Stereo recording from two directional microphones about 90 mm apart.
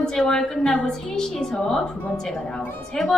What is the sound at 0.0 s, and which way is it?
A woman's voice, 5° left (ahead or behind).